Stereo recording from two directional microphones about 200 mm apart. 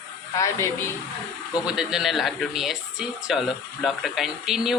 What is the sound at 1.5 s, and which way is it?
Speech, 5° right (ahead or behind).